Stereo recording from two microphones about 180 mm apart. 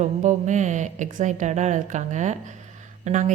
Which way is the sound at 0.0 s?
40° right (ahead or behind).